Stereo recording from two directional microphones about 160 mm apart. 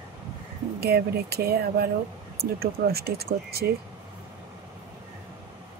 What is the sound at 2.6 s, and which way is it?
Speech, 75° right (ahead or behind).